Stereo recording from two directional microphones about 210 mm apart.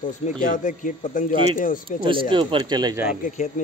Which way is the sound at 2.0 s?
25° right (ahead or behind).